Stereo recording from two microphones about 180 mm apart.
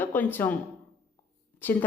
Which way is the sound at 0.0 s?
10° left (ahead or behind).